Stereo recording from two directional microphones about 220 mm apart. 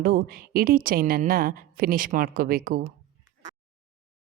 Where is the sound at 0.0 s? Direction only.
40° right (ahead or behind).